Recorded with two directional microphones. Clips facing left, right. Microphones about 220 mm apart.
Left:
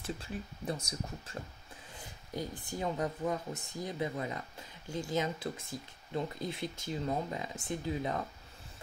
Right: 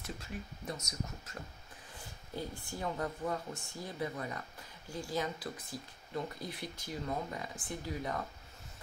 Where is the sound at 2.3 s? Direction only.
20° left (ahead or behind).